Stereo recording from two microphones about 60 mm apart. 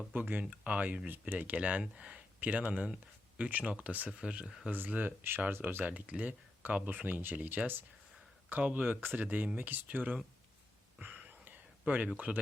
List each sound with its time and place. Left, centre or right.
0.1 s speech: right
2.4 s speech: right
4.7 s speech: right
11.0 s a sound: right